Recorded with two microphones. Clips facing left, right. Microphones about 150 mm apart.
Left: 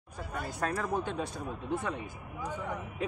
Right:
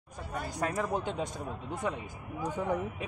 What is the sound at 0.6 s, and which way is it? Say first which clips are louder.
A man's voice: right 1 dB; 15° right (ahead or behind).